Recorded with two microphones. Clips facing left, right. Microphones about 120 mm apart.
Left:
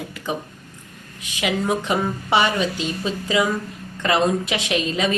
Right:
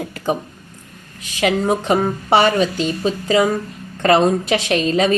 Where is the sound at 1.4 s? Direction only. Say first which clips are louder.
Right 5 dB; 40° right (ahead or behind).